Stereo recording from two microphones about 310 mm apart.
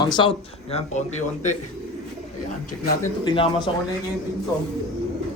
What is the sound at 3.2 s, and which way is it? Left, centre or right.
Speech, centre.